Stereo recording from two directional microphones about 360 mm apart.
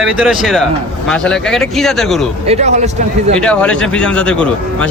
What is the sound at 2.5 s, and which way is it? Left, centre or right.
Speech, centre.